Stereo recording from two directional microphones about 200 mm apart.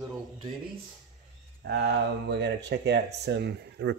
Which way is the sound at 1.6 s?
60° right (ahead or behind).